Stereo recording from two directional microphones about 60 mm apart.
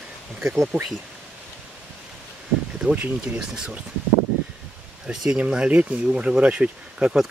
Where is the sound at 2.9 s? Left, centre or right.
Right.